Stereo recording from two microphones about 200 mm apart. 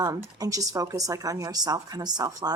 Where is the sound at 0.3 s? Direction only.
15° right (ahead or behind).